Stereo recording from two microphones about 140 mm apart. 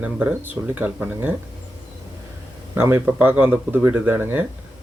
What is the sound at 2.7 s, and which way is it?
Speech, 15° right (ahead or behind).